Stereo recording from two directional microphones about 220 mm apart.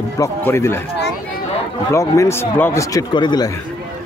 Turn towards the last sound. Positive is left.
turn(degrees=20)  # may be behind; listen again after turning